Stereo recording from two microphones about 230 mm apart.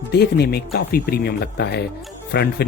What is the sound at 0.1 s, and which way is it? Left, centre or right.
Speech, left.